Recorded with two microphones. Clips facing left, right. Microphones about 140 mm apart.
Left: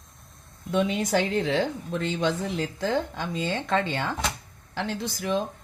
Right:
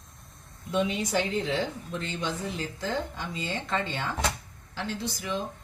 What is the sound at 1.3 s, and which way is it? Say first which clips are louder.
Speech: left 4 dB; 65° left (ahead or behind).